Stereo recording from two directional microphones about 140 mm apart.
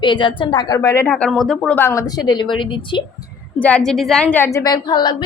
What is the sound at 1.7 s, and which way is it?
A woman's voice, 20° left (ahead or behind).